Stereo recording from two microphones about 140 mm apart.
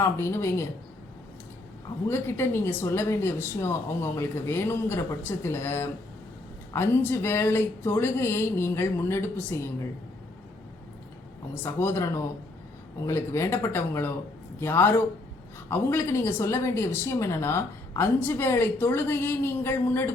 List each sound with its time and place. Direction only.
0.0 s speech: 20° left (ahead or behind)
2.0 s a woman's voice: 15° left (ahead or behind)
11.6 s a woman's voice: 15° left (ahead or behind)